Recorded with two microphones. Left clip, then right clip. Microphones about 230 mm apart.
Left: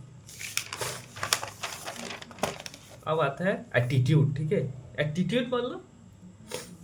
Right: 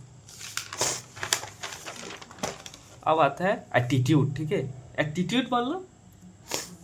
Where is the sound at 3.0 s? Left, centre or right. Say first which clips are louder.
Right 5 dB; right.